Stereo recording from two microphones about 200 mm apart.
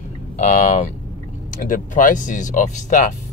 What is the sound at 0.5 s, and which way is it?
Speech, 40° left (ahead or behind).